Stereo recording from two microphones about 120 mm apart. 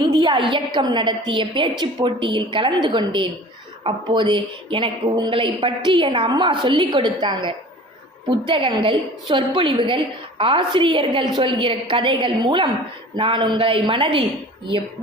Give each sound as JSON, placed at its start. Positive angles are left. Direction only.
{"t": 0.1, "sound": "a woman's voice", "side_deg": -45}